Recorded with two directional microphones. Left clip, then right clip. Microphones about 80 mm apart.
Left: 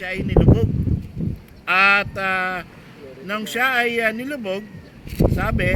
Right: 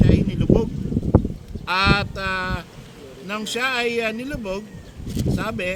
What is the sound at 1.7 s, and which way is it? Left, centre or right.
Speech, right.